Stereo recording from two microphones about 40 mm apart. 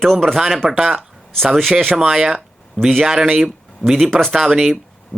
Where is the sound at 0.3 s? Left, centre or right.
Centre.